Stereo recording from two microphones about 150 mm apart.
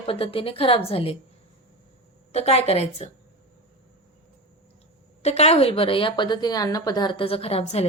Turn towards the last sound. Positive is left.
turn(degrees=40)  # may be behind; listen again after turning